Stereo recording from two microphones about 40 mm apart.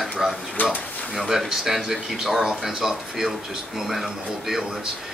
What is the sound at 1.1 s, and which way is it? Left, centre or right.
Speech, centre.